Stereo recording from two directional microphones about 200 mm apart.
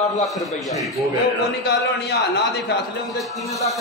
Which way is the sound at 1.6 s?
55° left (ahead or behind).